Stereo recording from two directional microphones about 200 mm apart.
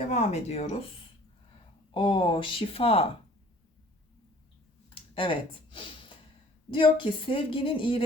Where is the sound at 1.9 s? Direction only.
25° left (ahead or behind).